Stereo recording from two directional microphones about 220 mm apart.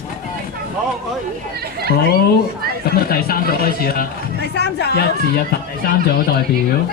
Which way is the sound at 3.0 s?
45° left (ahead or behind).